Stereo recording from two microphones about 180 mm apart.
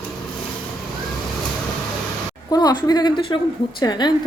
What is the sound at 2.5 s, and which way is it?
A woman's voice, 20° left (ahead or behind).